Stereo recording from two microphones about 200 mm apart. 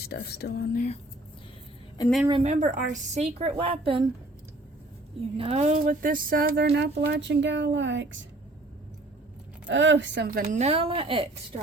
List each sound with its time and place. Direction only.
0.0 s speech: 55° left (ahead or behind)
2.4 s a woman's voice: 35° right (ahead or behind)
5.4 s speech: 30° right (ahead or behind); by 8.2 s 65° right (ahead or behind)
9.6 s speech: 65° right (ahead or behind)
10.4 s a woman's voice: 35° right (ahead or behind)